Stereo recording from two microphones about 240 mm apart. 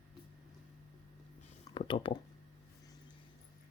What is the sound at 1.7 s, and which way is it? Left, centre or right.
Speech, left.